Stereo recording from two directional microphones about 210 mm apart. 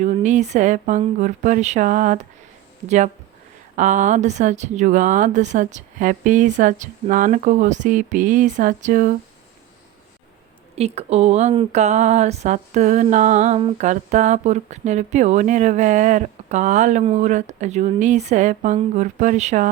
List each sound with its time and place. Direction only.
0.0 s speech: 35° right (ahead or behind)
3.8 s speech: 35° right (ahead or behind)
10.8 s speech: 30° right (ahead or behind)